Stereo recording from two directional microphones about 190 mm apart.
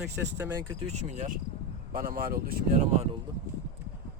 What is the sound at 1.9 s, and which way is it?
Speech, 50° right (ahead or behind).